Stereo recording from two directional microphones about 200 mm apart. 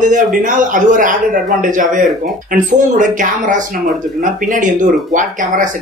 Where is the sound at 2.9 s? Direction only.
40° right (ahead or behind).